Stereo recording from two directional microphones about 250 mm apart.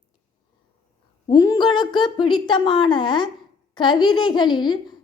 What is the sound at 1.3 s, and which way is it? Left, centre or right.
A woman's voice, centre.